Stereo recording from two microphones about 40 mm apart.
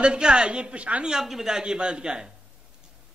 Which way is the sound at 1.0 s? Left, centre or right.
Centre.